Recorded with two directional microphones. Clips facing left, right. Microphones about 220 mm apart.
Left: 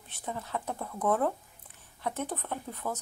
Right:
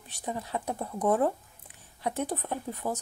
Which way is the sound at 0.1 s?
15° right (ahead or behind).